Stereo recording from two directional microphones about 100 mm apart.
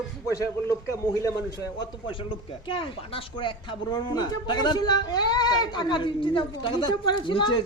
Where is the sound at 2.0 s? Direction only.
60° left (ahead or behind).